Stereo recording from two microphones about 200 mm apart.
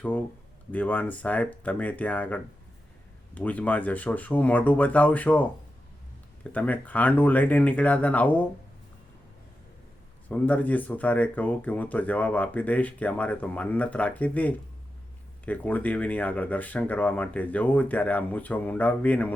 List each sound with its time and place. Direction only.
0.0 s speech: 5° left (ahead or behind)
10.2 s speech: 10° left (ahead or behind)